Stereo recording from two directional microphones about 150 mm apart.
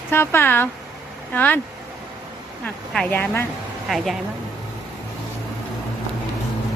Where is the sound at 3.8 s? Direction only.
Centre (ahead or behind).